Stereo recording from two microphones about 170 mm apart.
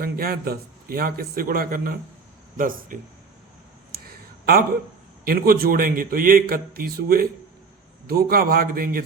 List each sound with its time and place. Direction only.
0.0 s a man's voice: 60° right (ahead or behind)
3.9 s a sound: 65° right (ahead or behind)
5.2 s a man's voice: 60° right (ahead or behind)